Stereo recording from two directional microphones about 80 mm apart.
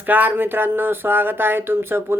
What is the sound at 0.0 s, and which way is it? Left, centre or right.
Speech, right.